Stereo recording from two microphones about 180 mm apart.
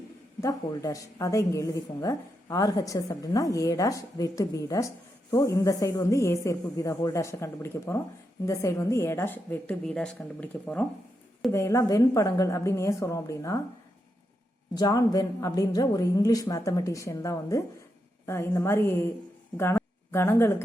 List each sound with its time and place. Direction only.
0.4 s a woman's voice: 20° left (ahead or behind)
14.8 s a woman's voice: 20° left (ahead or behind)